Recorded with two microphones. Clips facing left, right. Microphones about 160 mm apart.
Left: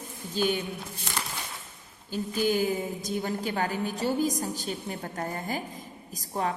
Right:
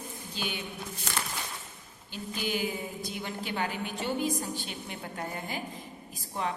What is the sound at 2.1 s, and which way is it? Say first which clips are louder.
A woman's voice: left 7 dB; 40° left (ahead or behind).